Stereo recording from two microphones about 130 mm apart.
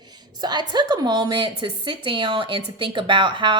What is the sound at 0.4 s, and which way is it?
A woman's voice, 35° right (ahead or behind).